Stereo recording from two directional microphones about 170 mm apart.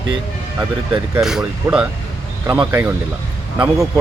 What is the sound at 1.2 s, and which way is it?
Speech, 5° right (ahead or behind).